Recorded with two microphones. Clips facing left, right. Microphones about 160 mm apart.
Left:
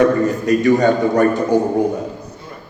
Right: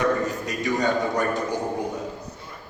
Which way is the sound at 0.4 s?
55° left (ahead or behind).